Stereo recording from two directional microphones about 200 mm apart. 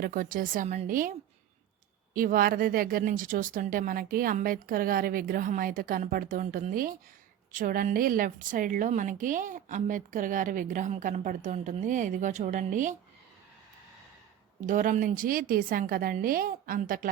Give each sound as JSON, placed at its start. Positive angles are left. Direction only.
{"t": 0.0, "sound": "speech", "side_deg": -45}
{"t": 2.1, "sound": "a woman's voice", "side_deg": -45}
{"t": 14.7, "sound": "speech", "side_deg": -40}